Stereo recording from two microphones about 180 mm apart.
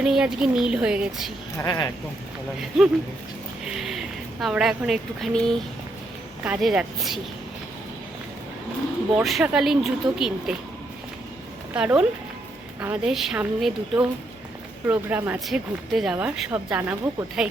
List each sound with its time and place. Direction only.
0.0 s speech: 5° right (ahead or behind)
1.5 s speech: 20° left (ahead or behind)
2.6 s a woman's voice: 5° right (ahead or behind)
9.1 s speech: 5° right (ahead or behind)
11.7 s speech: 5° right (ahead or behind)